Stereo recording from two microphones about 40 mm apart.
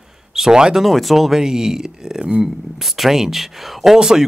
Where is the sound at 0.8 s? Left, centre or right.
Centre.